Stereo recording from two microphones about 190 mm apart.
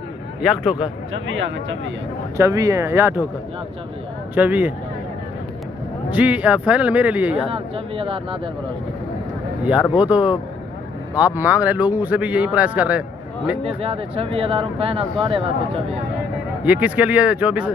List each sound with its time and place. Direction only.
2.3 s a man's voice: 15° right (ahead or behind)
4.4 s a man's voice: 10° right (ahead or behind)
6.0 s a man's voice: 10° right (ahead or behind)
7.5 s speech: 30° right (ahead or behind)
9.9 s a man's voice: 5° right (ahead or behind)
13.7 s speech: 30° right (ahead or behind)
16.6 s a man's voice: 10° right (ahead or behind)